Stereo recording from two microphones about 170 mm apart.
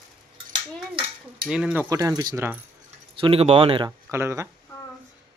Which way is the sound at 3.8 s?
15° right (ahead or behind).